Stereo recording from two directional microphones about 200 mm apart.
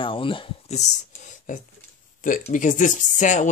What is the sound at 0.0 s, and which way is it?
Speech, 25° left (ahead or behind).